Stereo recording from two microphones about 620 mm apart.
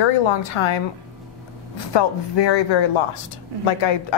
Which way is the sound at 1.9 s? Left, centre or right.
Left.